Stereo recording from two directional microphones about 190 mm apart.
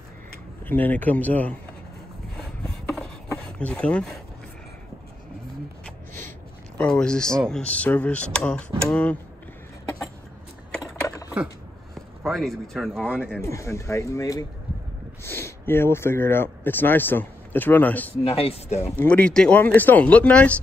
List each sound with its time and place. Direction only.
0.7 s speech: 10° left (ahead or behind)
2.6 s rub: 5° left (ahead or behind)
3.3 s a sound: 5° left (ahead or behind)
6.9 s speech: 5° left (ahead or behind)
10.8 s a sound: 15° left (ahead or behind)
11.9 s speech: centre (ahead or behind)
18.2 s speech: 30° left (ahead or behind)
18.9 s speech: 5° left (ahead or behind)